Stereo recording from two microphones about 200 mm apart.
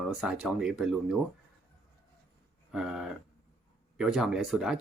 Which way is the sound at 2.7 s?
5° right (ahead or behind).